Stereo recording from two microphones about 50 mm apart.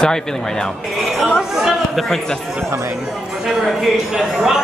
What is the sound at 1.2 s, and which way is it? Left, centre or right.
Speech, centre.